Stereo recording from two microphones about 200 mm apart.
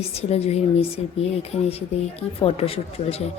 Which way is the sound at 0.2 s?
30° left (ahead or behind).